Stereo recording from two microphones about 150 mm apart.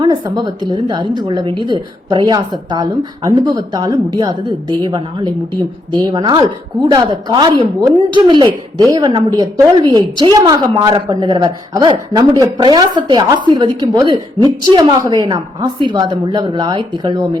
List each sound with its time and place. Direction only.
0.0 s a woman's voice: 25° right (ahead or behind)